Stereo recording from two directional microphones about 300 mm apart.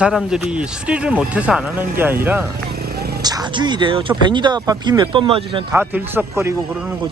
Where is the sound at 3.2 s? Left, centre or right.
Centre.